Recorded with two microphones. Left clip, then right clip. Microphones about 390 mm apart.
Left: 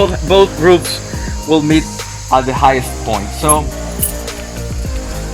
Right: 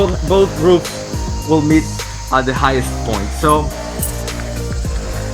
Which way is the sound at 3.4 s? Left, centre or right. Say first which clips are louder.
Right 1 dB; centre.